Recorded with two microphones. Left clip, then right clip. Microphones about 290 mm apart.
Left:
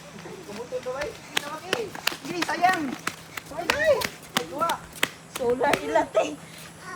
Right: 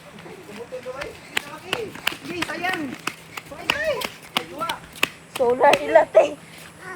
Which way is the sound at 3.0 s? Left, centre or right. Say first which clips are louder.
Right 2 dB; centre.